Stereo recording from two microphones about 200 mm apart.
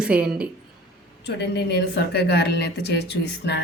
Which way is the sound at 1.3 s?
55° left (ahead or behind).